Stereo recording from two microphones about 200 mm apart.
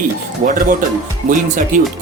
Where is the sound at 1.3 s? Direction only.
40° right (ahead or behind).